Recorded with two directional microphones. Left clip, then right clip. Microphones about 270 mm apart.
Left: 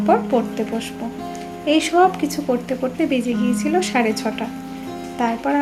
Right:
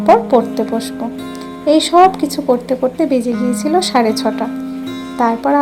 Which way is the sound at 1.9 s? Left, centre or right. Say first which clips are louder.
Right 7 dB; centre.